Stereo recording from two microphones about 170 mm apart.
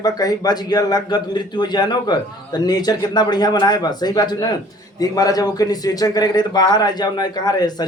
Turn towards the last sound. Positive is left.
turn(degrees=25)  # may be behind; listen again after turning